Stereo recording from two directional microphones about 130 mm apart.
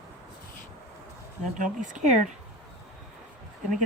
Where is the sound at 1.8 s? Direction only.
70° right (ahead or behind).